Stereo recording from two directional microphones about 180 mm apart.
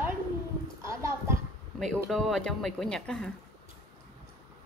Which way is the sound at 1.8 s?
Centre (ahead or behind).